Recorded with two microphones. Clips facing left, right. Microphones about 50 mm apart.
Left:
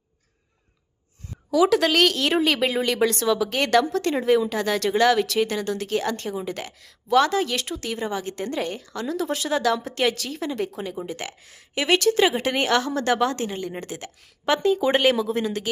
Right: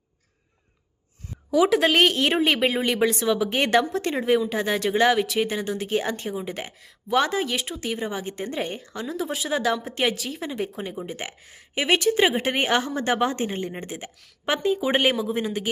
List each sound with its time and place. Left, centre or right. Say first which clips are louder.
1.5 s a woman's voice: even; centre
13.5 s a woman's voice: right 1 dB; right
13.7 s speech: left 1 dB; centre